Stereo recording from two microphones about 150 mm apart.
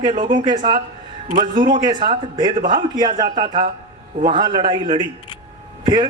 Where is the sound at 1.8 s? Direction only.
30° right (ahead or behind).